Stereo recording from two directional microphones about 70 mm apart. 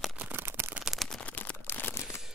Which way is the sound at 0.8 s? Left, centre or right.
Centre.